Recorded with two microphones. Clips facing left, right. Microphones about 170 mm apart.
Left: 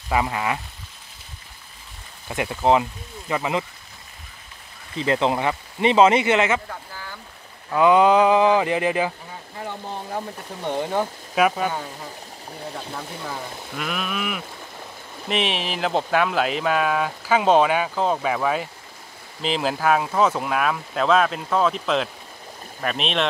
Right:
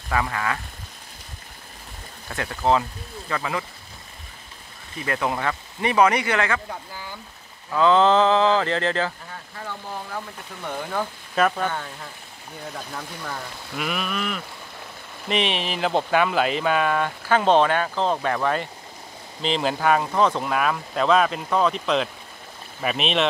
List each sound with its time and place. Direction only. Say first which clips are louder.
0.1 s speech: left 2 dB; 20° left (ahead or behind)
2.2 s speech: left 3 dB; 15° left (ahead or behind)
4.9 s speech: left 5 dB; 25° left (ahead or behind)
6.7 s speech: right 1 dB; 15° right (ahead or behind)
7.7 s speech: left 2 dB; 15° left (ahead or behind)
9.6 s speech: left 2 dB; 25° left (ahead or behind)
11.3 s speech: left 2 dB; 10° left (ahead or behind)
12.9 s speech: left 1 dB; 5° left (ahead or behind)